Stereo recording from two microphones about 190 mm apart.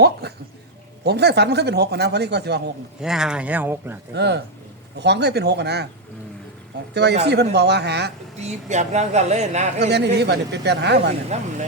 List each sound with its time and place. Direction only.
0.0 s speech: 60° right (ahead or behind)
3.0 s speech: 5° right (ahead or behind)
4.1 s speech: 60° right (ahead or behind)
6.9 s speech: 60° right (ahead or behind)
8.4 s speech: 35° right (ahead or behind)
9.8 s speech: 60° right (ahead or behind)
11.3 s speech: 35° right (ahead or behind)